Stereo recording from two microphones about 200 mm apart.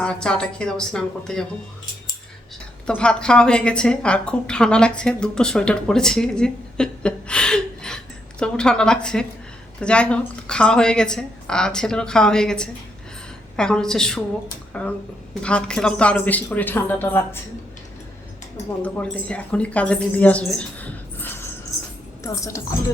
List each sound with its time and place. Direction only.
0.0 s a woman's voice: 5° left (ahead or behind)
2.8 s a woman's voice: 5° left (ahead or behind)
18.8 s a woman's voice: 5° left (ahead or behind)